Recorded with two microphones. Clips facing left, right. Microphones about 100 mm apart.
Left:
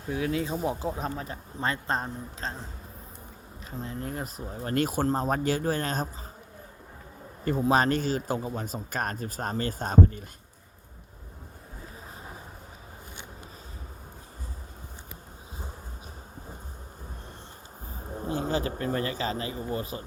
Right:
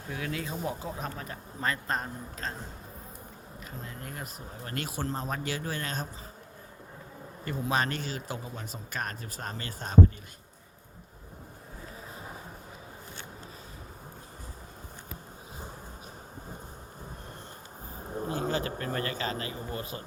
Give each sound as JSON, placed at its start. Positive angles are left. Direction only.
{"t": 0.1, "sound": "a man's voice", "side_deg": 30}
{"t": 3.8, "sound": "speech", "side_deg": 35}
{"t": 7.4, "sound": "speech", "side_deg": 40}
{"t": 18.8, "sound": "a man's voice", "side_deg": 25}